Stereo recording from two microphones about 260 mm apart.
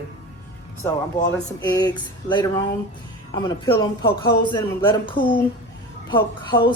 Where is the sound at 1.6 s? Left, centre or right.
Centre.